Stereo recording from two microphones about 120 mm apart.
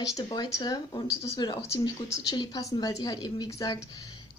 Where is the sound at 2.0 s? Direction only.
25° left (ahead or behind).